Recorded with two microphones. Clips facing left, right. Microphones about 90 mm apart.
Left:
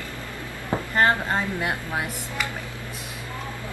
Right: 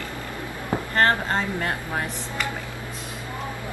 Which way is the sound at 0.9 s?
10° left (ahead or behind).